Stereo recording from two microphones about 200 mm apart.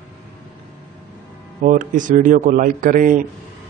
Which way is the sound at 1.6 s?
40° right (ahead or behind).